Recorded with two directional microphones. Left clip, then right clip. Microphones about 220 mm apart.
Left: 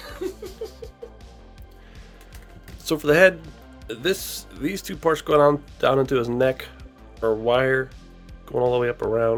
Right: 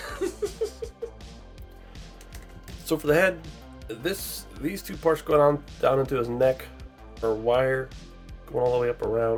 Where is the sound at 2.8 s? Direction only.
40° left (ahead or behind).